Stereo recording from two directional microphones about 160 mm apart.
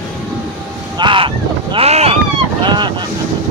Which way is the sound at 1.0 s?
30° right (ahead or behind).